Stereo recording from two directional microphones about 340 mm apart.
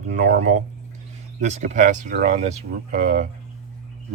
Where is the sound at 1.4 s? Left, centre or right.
Right.